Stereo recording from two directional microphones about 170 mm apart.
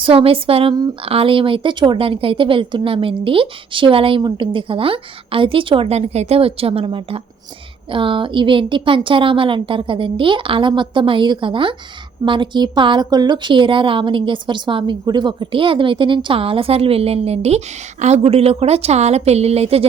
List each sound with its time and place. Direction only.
0.0 s a woman's voice: 30° right (ahead or behind)